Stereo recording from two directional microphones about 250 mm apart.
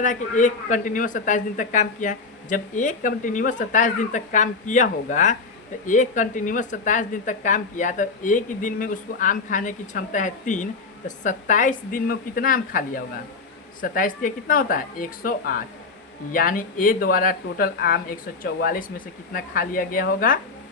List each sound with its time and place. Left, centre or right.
0.0 s a woman's voice: left